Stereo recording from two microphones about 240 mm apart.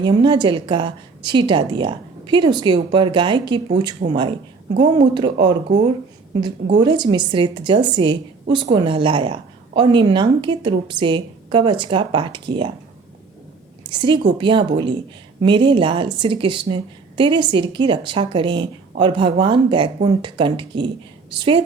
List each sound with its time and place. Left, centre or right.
0.0 s a woman's voice: centre
6.8 s a woman's voice: centre
13.9 s a woman's voice: centre